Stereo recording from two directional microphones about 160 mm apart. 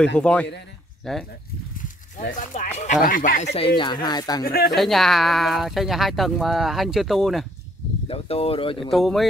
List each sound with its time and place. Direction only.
0.2 s speech: 5° left (ahead or behind)
2.1 s speech: 60° left (ahead or behind)
3.5 s speech: 30° left (ahead or behind)
4.5 s speech: 70° left (ahead or behind)
4.7 s speech: centre (ahead or behind)
8.1 s speech: 35° left (ahead or behind)
8.9 s speech: centre (ahead or behind)